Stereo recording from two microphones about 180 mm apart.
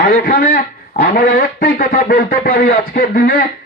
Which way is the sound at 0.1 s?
50° left (ahead or behind).